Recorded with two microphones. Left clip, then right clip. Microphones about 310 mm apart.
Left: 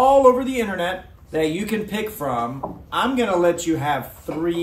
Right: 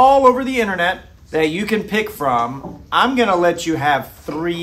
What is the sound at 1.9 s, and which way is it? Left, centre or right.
Speech, right.